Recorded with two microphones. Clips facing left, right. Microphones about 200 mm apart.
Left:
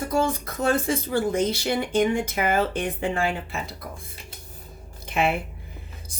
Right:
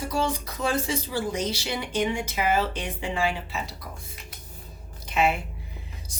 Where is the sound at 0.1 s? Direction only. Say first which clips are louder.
Left 4 dB; 50° left (ahead or behind).